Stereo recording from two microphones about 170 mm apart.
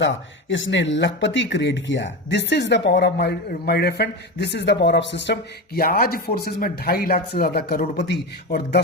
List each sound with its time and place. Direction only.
0.0 s speech: 90° left; by 8.8 s 75° left (ahead or behind)